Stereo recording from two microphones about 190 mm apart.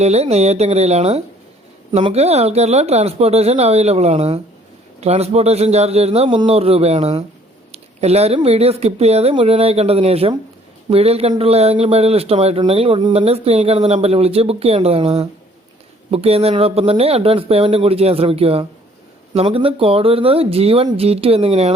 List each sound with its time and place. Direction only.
0.0 s a man's voice: 35° right (ahead or behind)